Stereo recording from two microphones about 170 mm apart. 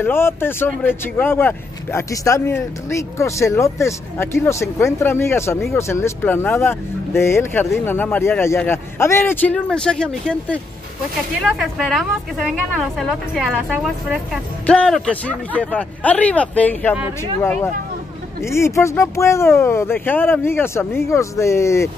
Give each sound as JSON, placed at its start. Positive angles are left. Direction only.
{"t": 0.0, "sound": "speech", "side_deg": 15}
{"t": 11.8, "sound": "a woman's voice", "side_deg": 0}